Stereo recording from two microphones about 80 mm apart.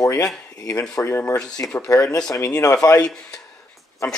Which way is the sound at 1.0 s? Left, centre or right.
Left.